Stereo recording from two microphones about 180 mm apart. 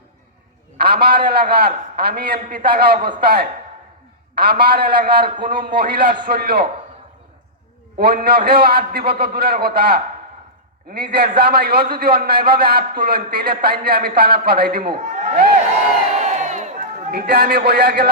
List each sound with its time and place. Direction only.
0.8 s a man's voice: 60° right (ahead or behind)
7.9 s a man's voice: 60° right (ahead or behind); by 15.4 s 40° right (ahead or behind)
16.1 s crowd: 45° right (ahead or behind); by 18.1 s 60° right (ahead or behind)